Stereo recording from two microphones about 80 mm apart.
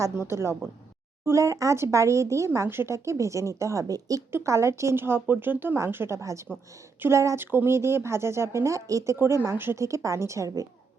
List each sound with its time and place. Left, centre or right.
0.0 s speech: right
4.3 s speech: right
9.1 s speech: right